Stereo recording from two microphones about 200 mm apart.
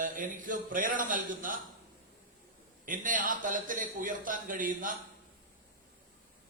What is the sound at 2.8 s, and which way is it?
A man's voice, 40° right (ahead or behind).